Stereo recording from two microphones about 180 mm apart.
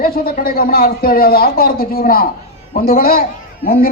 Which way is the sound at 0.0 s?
55° left (ahead or behind).